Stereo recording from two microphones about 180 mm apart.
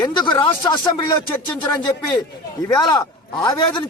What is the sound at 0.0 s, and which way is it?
A man's voice, 25° left (ahead or behind).